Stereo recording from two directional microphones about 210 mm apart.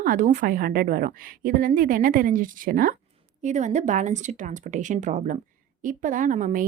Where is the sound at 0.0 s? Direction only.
40° right (ahead or behind).